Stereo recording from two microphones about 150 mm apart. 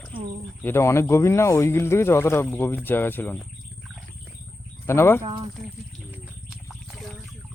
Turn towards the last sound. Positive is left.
turn(degrees=-5)  # may be behind; listen again after turning